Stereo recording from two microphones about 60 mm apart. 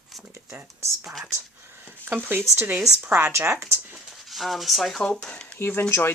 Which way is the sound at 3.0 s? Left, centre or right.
Right.